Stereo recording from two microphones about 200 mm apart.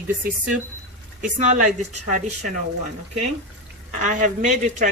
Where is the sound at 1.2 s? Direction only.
35° right (ahead or behind).